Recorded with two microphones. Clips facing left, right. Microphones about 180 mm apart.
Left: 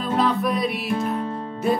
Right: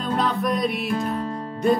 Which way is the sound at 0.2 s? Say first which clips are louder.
Left 2 dB; centre (ahead or behind).